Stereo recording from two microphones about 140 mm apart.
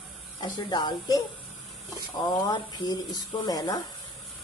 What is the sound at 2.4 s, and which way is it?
Speech, 30° left (ahead or behind).